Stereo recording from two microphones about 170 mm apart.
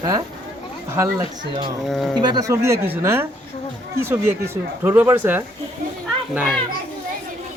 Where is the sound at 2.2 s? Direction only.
20° right (ahead or behind).